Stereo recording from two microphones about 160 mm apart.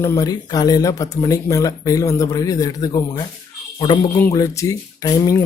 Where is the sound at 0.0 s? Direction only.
20° left (ahead or behind).